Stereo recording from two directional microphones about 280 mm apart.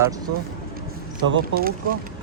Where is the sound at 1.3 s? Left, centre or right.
Right.